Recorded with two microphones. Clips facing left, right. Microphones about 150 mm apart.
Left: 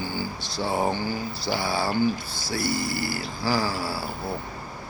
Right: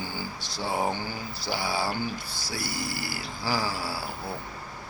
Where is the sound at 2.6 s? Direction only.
55° left (ahead or behind).